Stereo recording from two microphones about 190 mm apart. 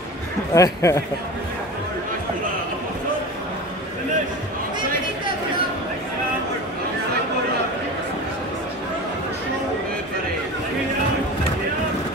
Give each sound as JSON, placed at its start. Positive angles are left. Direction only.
{"t": 0.6, "sound": "speech", "side_deg": 15}